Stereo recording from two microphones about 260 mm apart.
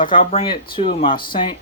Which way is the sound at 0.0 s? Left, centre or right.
Centre.